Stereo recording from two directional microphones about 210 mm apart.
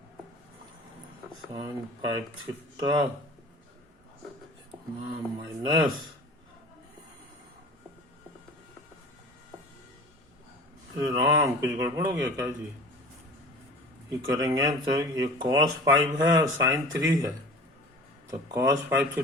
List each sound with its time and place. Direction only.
1.5 s speech: 20° right (ahead or behind)
5.0 s speech: 20° right (ahead or behind)
10.9 s speech: 20° right (ahead or behind)
14.1 s speech: 15° right (ahead or behind)